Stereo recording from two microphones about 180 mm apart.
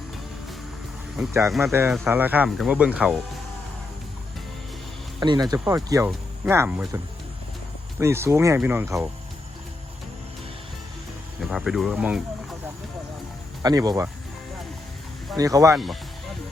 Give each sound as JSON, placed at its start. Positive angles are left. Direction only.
{"t": 1.3, "sound": "speech", "side_deg": -15}
{"t": 5.2, "sound": "speech", "side_deg": -25}
{"t": 11.4, "sound": "speech", "side_deg": -5}
{"t": 13.6, "sound": "speech", "side_deg": -20}
{"t": 15.4, "sound": "speech", "side_deg": -20}
{"t": 15.7, "sound": "speech", "side_deg": 0}